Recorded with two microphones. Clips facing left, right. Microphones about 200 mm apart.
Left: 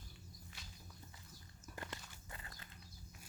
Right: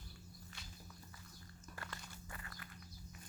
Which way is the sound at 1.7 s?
20° left (ahead or behind).